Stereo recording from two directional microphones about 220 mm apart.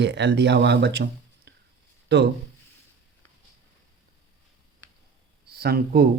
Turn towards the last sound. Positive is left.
turn(degrees=-45)  # may be behind; listen again after turning